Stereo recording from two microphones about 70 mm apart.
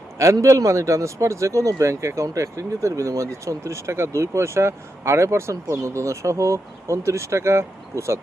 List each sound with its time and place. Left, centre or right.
0.4 s speech: right